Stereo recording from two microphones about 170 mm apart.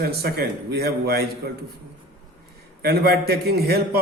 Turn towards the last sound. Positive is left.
turn(degrees=-65)  # may be behind; listen again after turning